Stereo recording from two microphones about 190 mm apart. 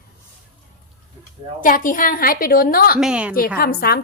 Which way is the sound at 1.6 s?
45° left (ahead or behind).